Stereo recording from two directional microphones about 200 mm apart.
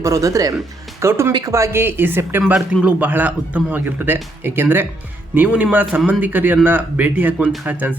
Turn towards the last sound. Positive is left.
turn(degrees=-10)  # may be behind; listen again after turning